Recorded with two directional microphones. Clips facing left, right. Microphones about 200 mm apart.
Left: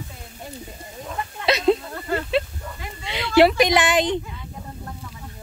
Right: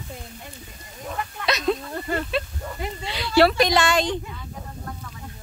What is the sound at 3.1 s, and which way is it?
Speech, 20° left (ahead or behind).